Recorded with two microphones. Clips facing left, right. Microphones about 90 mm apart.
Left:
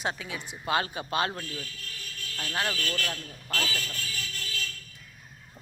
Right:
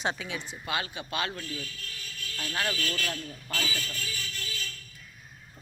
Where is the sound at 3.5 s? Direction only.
50° left (ahead or behind).